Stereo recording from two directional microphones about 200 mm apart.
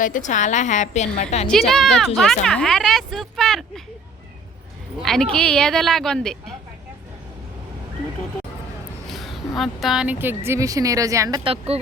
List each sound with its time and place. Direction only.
0.0 s a woman's voice: 40° left (ahead or behind)
1.5 s speech: centre (ahead or behind)
5.0 s speech: 5° left (ahead or behind)
9.0 s speech: centre (ahead or behind); by 11.6 s 25° right (ahead or behind)